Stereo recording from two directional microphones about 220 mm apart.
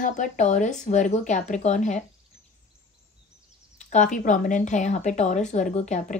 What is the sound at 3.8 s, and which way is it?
Speech, 35° left (ahead or behind).